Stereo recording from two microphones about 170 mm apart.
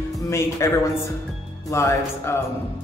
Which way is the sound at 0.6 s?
20° left (ahead or behind).